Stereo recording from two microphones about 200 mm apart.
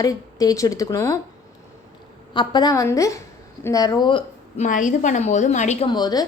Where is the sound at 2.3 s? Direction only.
20° left (ahead or behind).